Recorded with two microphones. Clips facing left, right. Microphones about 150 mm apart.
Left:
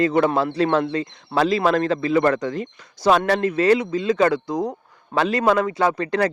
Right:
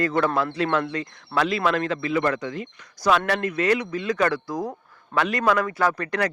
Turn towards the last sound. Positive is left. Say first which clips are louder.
# left 4 dB
turn(degrees=25)  # may be behind; listen again after turning